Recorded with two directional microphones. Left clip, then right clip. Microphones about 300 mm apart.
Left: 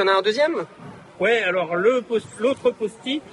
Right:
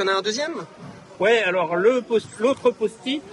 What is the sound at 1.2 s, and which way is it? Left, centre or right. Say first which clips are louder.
A man's voice: right 1 dB; right.